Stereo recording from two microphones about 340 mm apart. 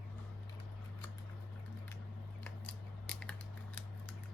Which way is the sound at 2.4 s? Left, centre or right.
Centre.